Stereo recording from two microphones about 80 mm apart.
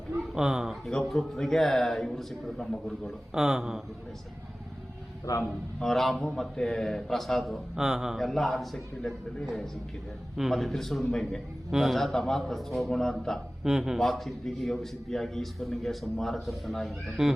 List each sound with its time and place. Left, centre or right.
0.3 s speech: centre
0.9 s a man's voice: centre
5.2 s a man's voice: left
5.8 s a man's voice: centre
13.7 s a man's voice: centre